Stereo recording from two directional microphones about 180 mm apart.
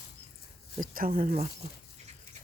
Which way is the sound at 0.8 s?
50° right (ahead or behind).